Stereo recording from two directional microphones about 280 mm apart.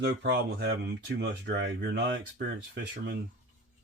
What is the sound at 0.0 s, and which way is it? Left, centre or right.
Speech, right.